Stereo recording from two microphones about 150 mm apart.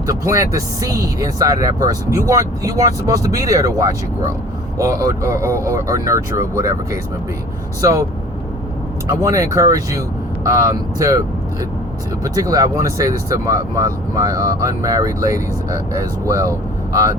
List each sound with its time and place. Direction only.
0.1 s speech: 20° right (ahead or behind)
9.0 s speech: 20° right (ahead or behind)
12.2 s speech: 25° right (ahead or behind)